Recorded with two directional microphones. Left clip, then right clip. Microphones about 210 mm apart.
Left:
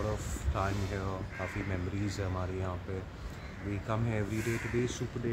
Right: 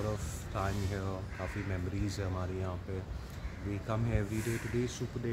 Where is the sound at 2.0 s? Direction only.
5° left (ahead or behind).